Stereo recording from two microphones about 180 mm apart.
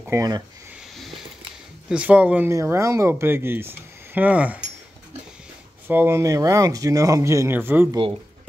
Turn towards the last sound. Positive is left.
turn(degrees=-10)  # may be behind; listen again after turning